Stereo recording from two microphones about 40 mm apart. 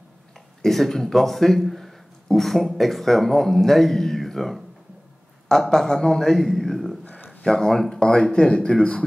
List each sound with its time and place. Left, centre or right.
0.6 s a man's voice: centre; by 9.0 s left